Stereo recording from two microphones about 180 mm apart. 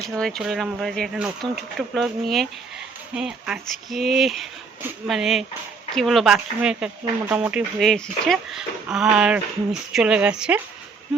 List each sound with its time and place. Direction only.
0.2 s speech: centre (ahead or behind)